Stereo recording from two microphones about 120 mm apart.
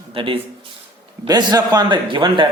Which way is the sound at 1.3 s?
35° right (ahead or behind).